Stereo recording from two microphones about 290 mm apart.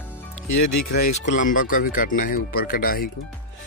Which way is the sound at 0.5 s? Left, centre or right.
Left.